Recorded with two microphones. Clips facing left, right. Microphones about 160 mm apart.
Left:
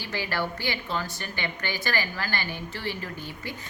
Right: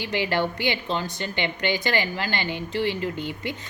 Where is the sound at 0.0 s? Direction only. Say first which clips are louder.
Right 6 dB; 20° right (ahead or behind).